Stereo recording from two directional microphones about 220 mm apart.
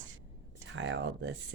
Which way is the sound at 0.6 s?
60° right (ahead or behind).